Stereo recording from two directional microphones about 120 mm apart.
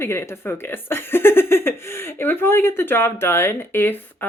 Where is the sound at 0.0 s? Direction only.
20° left (ahead or behind).